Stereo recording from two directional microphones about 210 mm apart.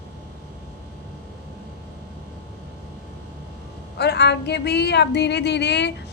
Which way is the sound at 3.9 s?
50° left (ahead or behind).